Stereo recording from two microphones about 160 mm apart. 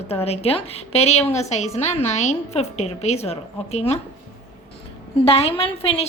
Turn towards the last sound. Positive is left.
turn(degrees=35)  # may be behind; listen again after turning